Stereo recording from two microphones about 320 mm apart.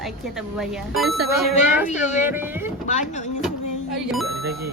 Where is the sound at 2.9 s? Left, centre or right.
Left.